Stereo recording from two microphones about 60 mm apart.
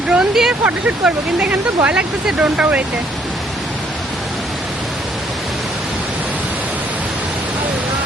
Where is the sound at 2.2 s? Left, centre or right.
Centre.